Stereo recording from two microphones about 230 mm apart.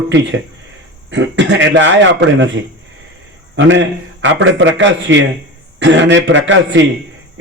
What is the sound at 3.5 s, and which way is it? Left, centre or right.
A man's voice, right.